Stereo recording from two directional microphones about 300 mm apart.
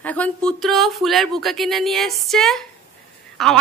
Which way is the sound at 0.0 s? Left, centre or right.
Centre.